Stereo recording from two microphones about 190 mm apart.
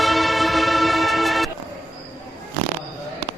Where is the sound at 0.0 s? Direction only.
Centre (ahead or behind).